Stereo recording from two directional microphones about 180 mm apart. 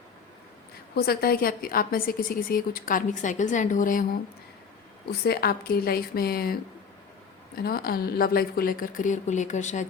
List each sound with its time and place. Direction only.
0.9 s a woman's voice: 60° left (ahead or behind)
5.2 s a woman's voice: 60° left (ahead or behind); by 9.8 s 40° left (ahead or behind)